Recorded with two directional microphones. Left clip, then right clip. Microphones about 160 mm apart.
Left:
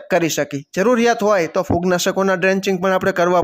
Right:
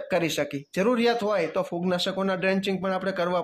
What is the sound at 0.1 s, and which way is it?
Speech, 35° left (ahead or behind).